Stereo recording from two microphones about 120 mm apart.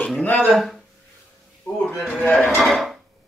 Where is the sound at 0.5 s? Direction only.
Centre (ahead or behind).